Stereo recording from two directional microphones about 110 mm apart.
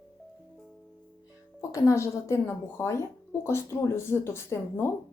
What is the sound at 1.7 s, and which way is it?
Speech, 30° left (ahead or behind).